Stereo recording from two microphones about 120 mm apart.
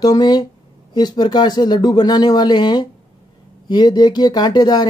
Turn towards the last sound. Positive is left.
turn(degrees=35)  # may be behind; listen again after turning